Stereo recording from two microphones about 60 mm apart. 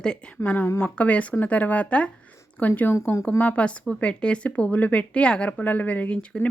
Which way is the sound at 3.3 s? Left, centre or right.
Left.